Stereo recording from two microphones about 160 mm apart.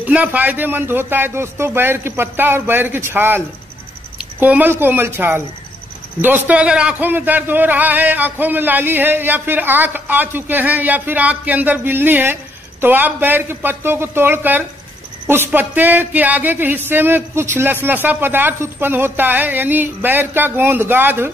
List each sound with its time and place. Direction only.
0.0 s a man's voice: 10° right (ahead or behind)